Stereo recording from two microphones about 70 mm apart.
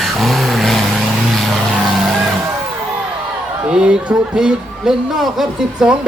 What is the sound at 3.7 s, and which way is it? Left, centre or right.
Speech, centre.